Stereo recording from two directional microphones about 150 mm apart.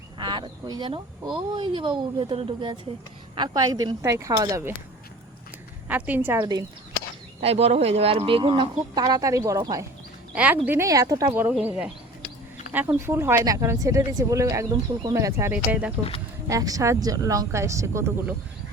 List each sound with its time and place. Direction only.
0.2 s speech: 30° right (ahead or behind)
5.9 s a woman's voice: 10° right (ahead or behind)
6.4 s speech: 30° right (ahead or behind)
7.4 s speech: 45° right (ahead or behind); by 9.8 s 25° right (ahead or behind)
10.3 s speech: 10° right (ahead or behind)
10.7 s a woman's voice: 20° right (ahead or behind)
15.5 s a woman's voice: 10° right (ahead or behind)
16.5 s speech: 25° right (ahead or behind)